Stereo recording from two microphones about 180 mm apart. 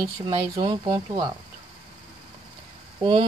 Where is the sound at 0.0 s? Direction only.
25° right (ahead or behind).